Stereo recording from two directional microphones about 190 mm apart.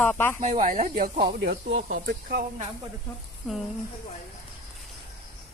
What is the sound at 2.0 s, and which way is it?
Speech, 55° right (ahead or behind).